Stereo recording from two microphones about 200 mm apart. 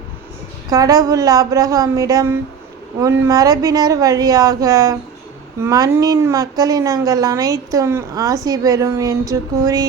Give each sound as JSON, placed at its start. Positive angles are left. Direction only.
{"t": 0.7, "sound": "a woman's voice", "side_deg": -20}